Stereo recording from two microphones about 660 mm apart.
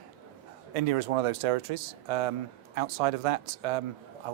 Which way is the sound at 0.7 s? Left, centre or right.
Right.